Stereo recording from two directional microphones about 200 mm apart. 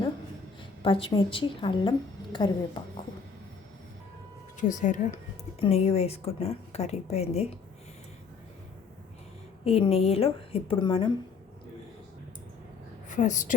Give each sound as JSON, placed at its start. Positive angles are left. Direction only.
{"t": 0.8, "sound": "a woman's voice", "side_deg": 25}
{"t": 4.7, "sound": "speech", "side_deg": 40}
{"t": 9.6, "sound": "a woman's voice", "side_deg": 30}
{"t": 13.1, "sound": "a woman's voice", "side_deg": 40}